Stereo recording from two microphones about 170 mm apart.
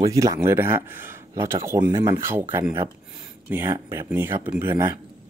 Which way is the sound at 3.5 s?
15° right (ahead or behind).